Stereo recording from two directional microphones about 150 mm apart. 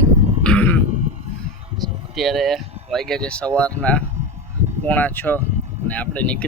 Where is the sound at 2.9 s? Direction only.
5° left (ahead or behind).